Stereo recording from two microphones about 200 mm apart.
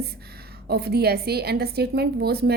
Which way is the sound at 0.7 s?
55° right (ahead or behind).